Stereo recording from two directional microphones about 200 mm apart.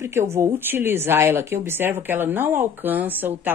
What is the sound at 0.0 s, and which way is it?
Speech, 15° right (ahead or behind).